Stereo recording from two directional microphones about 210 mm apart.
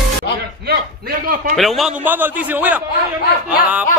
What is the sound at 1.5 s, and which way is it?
A man's voice, centre (ahead or behind).